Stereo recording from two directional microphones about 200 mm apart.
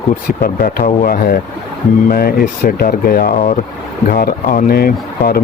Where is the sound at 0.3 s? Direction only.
45° left (ahead or behind).